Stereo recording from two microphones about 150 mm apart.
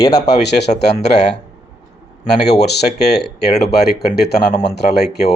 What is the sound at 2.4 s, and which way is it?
Speech, 90° left.